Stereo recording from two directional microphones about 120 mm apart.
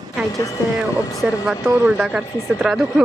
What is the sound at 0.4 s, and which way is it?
Speech, 25° left (ahead or behind).